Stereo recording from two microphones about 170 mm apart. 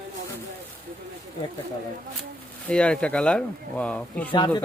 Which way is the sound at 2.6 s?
5° left (ahead or behind).